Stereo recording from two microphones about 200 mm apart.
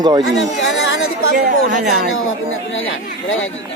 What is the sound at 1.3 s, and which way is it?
Speech, 40° right (ahead or behind).